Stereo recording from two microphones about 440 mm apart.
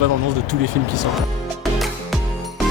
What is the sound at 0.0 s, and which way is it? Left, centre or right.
Speech, right.